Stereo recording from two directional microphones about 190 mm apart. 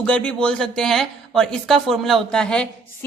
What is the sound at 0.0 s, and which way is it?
A woman's voice, 5° left (ahead or behind).